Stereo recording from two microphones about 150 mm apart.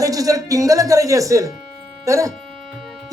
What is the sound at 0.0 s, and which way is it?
Speech, 25° right (ahead or behind).